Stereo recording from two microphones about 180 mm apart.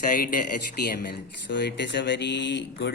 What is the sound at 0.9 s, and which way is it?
Speech, 70° left (ahead or behind).